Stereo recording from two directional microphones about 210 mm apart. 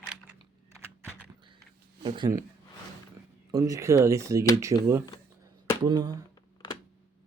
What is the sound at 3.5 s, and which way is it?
Speech, 15° right (ahead or behind).